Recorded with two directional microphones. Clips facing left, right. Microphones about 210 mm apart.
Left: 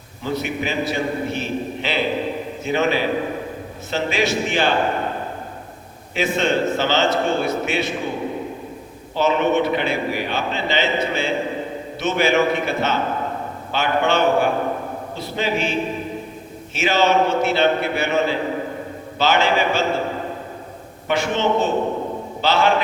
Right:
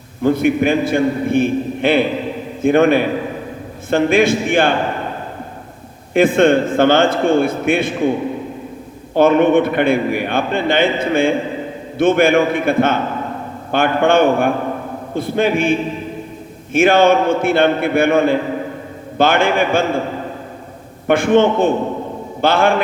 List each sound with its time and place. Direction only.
0.2 s a man's voice: 55° right (ahead or behind)
6.1 s a man's voice: 55° right (ahead or behind)
9.1 s a man's voice: 55° right (ahead or behind)
21.1 s a man's voice: 55° right (ahead or behind)